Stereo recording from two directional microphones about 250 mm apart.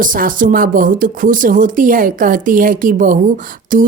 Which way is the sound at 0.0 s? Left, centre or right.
Right.